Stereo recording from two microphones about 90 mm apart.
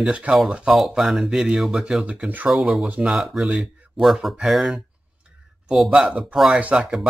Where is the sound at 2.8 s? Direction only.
15° right (ahead or behind).